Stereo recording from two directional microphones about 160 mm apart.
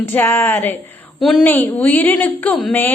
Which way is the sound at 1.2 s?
Centre (ahead or behind).